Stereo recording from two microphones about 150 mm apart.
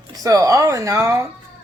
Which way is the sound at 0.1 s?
25° right (ahead or behind).